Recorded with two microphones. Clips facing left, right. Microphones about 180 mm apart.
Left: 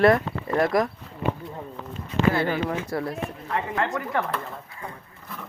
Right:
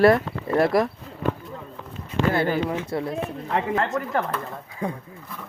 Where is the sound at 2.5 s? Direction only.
20° right (ahead or behind).